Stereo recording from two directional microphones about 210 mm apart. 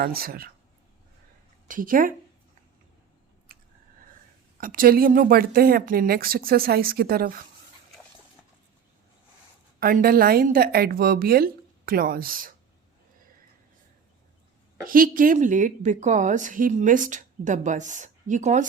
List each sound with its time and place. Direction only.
0.0 s a woman's voice: 45° right (ahead or behind)
1.6 s a woman's voice: 40° right (ahead or behind)
4.6 s a woman's voice: 40° right (ahead or behind)
9.8 s a woman's voice: 45° right (ahead or behind)
14.8 s a woman's voice: 40° right (ahead or behind)